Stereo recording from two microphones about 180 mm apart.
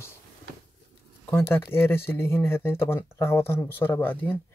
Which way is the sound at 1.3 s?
15° left (ahead or behind).